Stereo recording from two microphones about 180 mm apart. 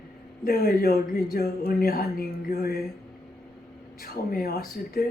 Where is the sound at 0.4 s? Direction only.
60° left (ahead or behind).